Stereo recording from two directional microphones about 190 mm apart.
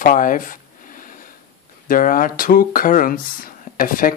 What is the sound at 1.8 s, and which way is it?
Speech, 45° left (ahead or behind).